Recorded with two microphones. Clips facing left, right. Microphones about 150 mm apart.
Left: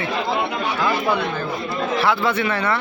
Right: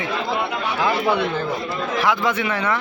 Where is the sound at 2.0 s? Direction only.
15° right (ahead or behind).